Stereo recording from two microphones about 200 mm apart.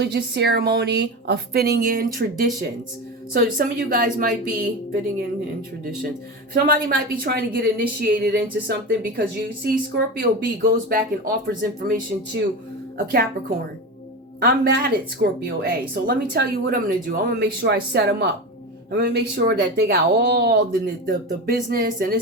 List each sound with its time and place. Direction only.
0.0 s a woman's voice: 55° right (ahead or behind)
6.5 s speech: 45° right (ahead or behind)
14.4 s speech: 50° right (ahead or behind)